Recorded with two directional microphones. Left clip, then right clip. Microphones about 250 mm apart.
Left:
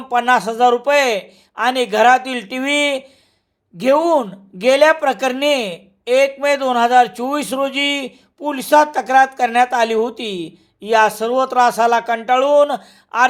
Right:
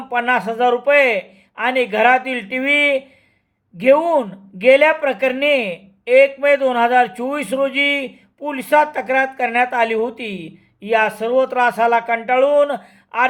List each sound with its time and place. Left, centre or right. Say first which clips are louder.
0.1 s speech: left 3 dB; centre